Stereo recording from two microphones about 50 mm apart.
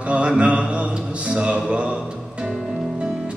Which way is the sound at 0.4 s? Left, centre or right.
Right.